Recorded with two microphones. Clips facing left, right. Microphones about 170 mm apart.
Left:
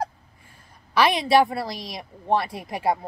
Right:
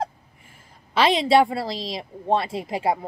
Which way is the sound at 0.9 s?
25° right (ahead or behind).